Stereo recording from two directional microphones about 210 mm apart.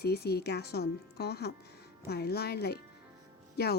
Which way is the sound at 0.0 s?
50° left (ahead or behind).